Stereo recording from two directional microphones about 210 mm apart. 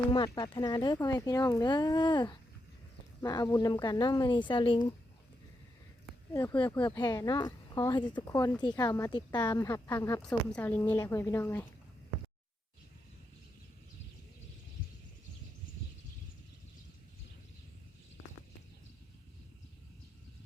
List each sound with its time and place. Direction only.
0.3 s speech: 20° left (ahead or behind)
6.3 s a woman's voice: 15° left (ahead or behind)